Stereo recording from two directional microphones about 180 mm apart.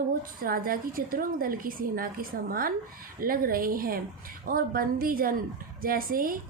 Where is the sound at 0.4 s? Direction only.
55° right (ahead or behind).